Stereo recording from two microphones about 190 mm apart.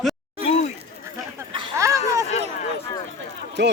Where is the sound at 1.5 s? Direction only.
20° right (ahead or behind).